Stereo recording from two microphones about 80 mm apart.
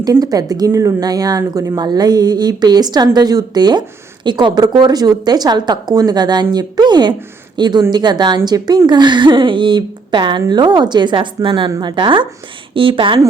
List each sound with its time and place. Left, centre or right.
0.2 s speech: right
1.8 s a woman's voice: right
8.9 s a woman's voice: right
11.8 s a woman's voice: right